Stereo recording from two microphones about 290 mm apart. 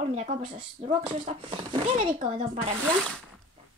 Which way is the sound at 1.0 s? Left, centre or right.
Centre.